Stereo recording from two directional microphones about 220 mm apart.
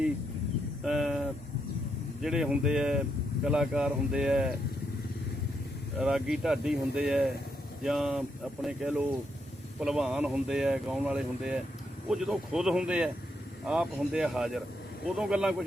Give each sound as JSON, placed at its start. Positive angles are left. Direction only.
{"t": 0.8, "sound": "a sound", "side_deg": 0}
{"t": 2.2, "sound": "speech", "side_deg": 0}
{"t": 6.0, "sound": "speech", "side_deg": -5}